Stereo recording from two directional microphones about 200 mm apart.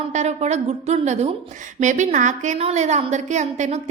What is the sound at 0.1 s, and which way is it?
A woman's voice, 35° right (ahead or behind).